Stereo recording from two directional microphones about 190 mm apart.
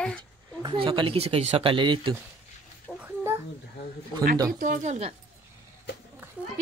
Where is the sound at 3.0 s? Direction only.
10° right (ahead or behind).